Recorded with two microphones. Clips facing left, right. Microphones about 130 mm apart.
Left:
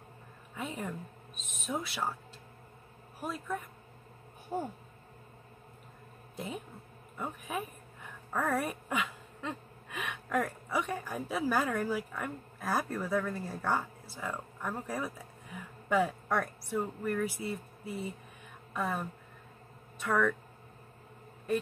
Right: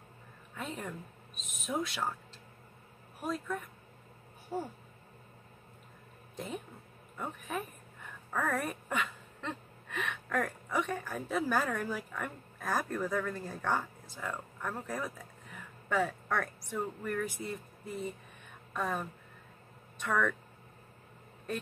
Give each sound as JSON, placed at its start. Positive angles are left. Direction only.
{"t": 0.6, "sound": "speech", "side_deg": 10}
{"t": 4.5, "sound": "speech", "side_deg": 20}
{"t": 6.3, "sound": "a woman's voice", "side_deg": 0}